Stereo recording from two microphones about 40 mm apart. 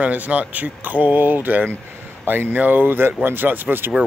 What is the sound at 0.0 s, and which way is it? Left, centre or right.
Speech, right.